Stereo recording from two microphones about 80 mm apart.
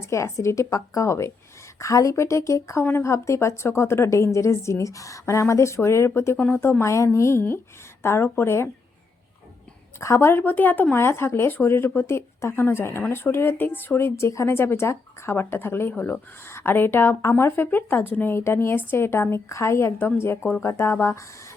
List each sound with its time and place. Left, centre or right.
0.0 s a woman's voice: left
10.0 s a woman's voice: left